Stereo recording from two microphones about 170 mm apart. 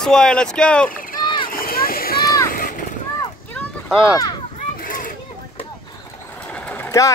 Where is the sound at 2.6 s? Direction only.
55° left (ahead or behind).